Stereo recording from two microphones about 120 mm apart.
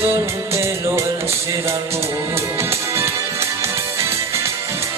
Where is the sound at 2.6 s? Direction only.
20° right (ahead or behind).